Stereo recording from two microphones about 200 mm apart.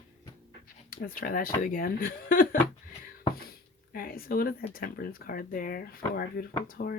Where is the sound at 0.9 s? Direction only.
45° left (ahead or behind).